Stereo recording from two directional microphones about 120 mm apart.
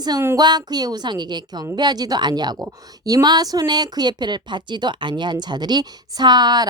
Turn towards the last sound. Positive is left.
turn(degrees=-35)  # may be behind; listen again after turning